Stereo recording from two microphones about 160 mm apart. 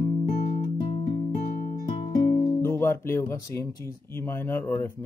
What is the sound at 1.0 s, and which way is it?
Music, 50° left (ahead or behind).